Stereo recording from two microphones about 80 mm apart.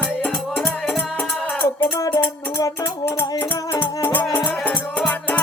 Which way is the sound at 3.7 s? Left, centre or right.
Left.